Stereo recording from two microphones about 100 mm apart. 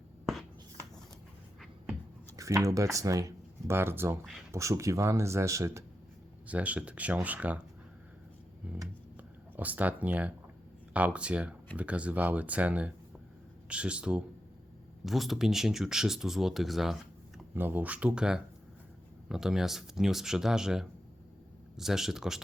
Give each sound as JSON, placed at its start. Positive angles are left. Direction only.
{"t": 2.3, "sound": "a sound", "side_deg": -30}
{"t": 2.6, "sound": "speech", "side_deg": -35}
{"t": 3.8, "sound": "speech", "side_deg": -25}
{"t": 6.5, "sound": "speech", "side_deg": -15}
{"t": 8.6, "sound": "a sound", "side_deg": -15}
{"t": 9.1, "sound": "speech", "side_deg": -15}
{"t": 17.5, "sound": "speech", "side_deg": -20}